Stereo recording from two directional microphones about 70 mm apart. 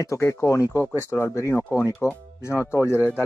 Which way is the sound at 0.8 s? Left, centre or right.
Left.